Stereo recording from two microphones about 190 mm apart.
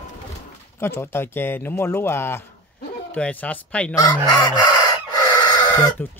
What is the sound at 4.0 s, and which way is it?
Chicken, 20° left (ahead or behind).